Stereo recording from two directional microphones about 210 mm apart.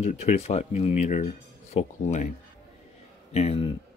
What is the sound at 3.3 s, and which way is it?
Speech, 30° left (ahead or behind).